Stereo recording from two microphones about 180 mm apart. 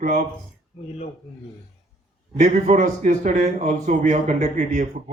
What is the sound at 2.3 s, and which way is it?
Speech, 40° right (ahead or behind).